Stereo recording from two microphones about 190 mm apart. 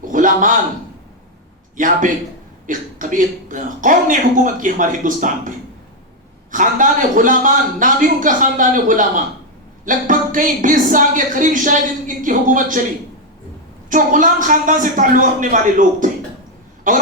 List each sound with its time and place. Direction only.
0.0 s a sound: 45° right (ahead or behind)
1.7 s speech: 45° right (ahead or behind)
6.5 s speech: 45° right (ahead or behind)
13.9 s speech: 45° right (ahead or behind)